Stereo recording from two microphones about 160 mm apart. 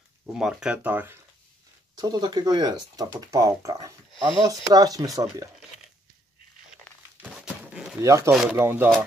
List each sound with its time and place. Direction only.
0.3 s speech: 5° right (ahead or behind)
2.0 s speech: 25° right (ahead or behind)
7.2 s a sound: 5° right (ahead or behind)
8.0 s speech: 20° right (ahead or behind)